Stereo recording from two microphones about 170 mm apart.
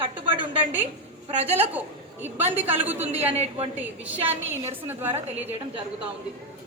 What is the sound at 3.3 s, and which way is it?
Speech, 40° right (ahead or behind).